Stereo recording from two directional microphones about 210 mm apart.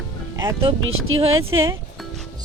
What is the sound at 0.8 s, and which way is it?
Speech, 75° right (ahead or behind).